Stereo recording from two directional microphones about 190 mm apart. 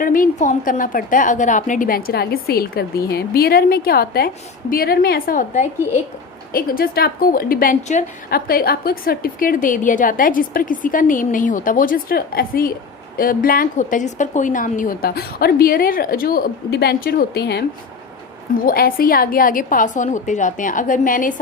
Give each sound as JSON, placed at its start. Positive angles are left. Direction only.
{"t": 0.0, "sound": "a woman's voice", "side_deg": 45}